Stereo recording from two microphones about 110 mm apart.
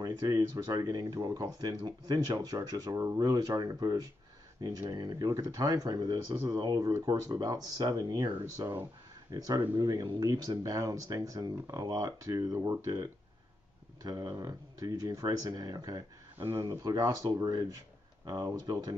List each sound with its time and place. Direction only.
0.0 s speech: 35° right (ahead or behind)
14.0 s speech: 35° right (ahead or behind)